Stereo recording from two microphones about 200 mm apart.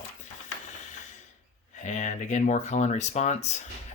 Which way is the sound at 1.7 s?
35° left (ahead or behind).